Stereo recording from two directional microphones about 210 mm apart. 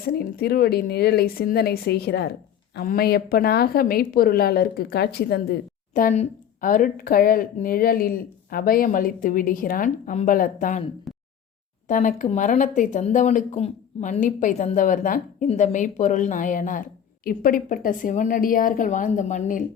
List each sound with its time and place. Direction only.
0.0 s a woman's voice: 45° left (ahead or behind)
11.1 s a sound: centre (ahead or behind)
11.9 s a woman's voice: 35° left (ahead or behind)